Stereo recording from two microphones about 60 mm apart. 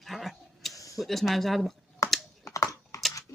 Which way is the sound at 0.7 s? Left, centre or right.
Left.